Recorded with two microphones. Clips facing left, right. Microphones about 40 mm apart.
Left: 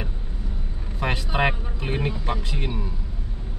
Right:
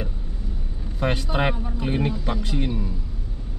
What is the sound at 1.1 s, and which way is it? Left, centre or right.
Speech, centre.